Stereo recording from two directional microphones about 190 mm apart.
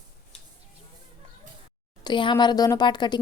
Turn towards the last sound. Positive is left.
turn(degrees=25)  # may be behind; listen again after turning